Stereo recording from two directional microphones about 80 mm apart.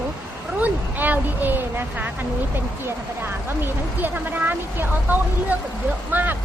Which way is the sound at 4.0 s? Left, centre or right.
Right.